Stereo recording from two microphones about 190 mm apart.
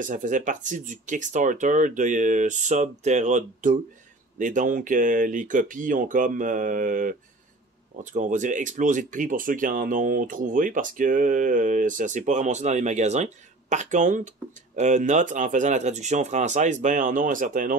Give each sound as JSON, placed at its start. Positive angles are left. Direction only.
{"t": 0.0, "sound": "speech", "side_deg": -45}